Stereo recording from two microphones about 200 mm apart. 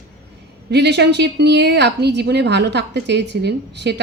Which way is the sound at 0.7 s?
55° right (ahead or behind).